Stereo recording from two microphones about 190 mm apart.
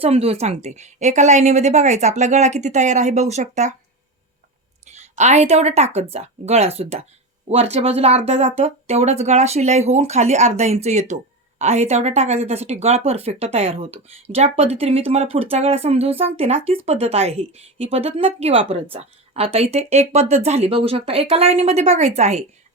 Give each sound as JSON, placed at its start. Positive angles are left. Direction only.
{"t": 0.0, "sound": "a woman's voice", "side_deg": -30}
{"t": 4.9, "sound": "a woman's voice", "side_deg": -35}